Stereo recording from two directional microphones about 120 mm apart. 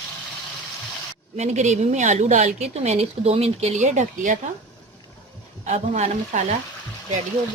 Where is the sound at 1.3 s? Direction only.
70° right (ahead or behind).